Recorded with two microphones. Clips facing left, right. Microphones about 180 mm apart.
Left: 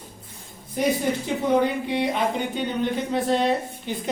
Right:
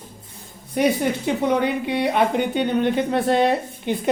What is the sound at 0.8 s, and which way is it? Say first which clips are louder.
A woman's voice: right 3 dB; 65° right (ahead or behind).